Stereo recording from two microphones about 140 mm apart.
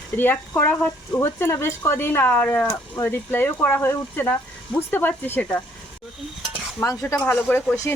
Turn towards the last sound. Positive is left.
turn(degrees=10)  # may be behind; listen again after turning